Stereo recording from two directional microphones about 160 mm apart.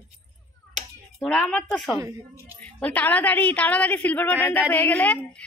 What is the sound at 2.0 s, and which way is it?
Speech, 20° right (ahead or behind).